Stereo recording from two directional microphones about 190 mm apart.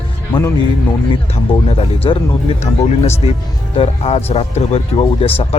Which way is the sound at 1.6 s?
30° left (ahead or behind).